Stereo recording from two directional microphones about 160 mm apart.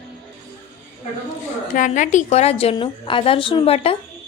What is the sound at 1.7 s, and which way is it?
A woman's voice, 55° left (ahead or behind).